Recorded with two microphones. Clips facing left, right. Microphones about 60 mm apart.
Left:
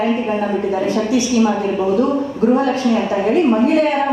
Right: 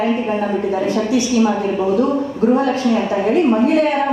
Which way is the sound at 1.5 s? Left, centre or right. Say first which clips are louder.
Even; left.